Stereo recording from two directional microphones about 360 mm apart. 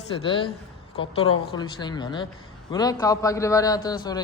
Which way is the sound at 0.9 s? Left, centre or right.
Centre.